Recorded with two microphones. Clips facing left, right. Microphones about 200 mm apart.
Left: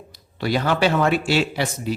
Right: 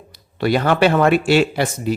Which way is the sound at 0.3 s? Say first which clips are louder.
Right 5 dB; 55° right (ahead or behind).